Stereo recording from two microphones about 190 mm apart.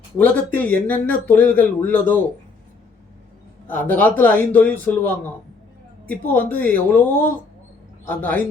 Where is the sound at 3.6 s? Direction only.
10° left (ahead or behind).